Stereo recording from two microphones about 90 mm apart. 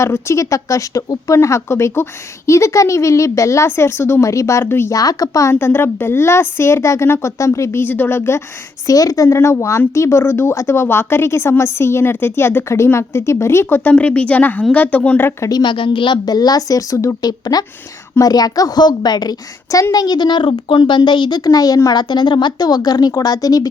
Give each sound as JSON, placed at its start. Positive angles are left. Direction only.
{"t": 0.0, "sound": "a woman's voice", "side_deg": 30}
{"t": 4.9, "sound": "a woman's voice", "side_deg": 40}
{"t": 8.9, "sound": "a woman's voice", "side_deg": 40}
{"t": 15.4, "sound": "a woman's voice", "side_deg": 45}
{"t": 15.6, "sound": "a woman's voice", "side_deg": 65}
{"t": 21.8, "sound": "a woman's voice", "side_deg": 55}